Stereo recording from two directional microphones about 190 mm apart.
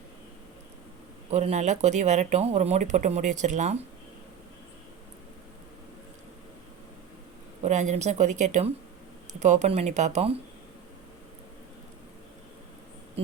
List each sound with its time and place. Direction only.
1.3 s speech: 35° right (ahead or behind)
7.6 s speech: 40° right (ahead or behind)